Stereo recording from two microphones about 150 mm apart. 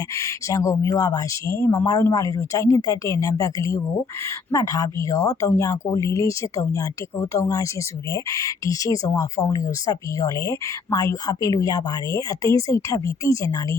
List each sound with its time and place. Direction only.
0.2 s speech: 20° left (ahead or behind)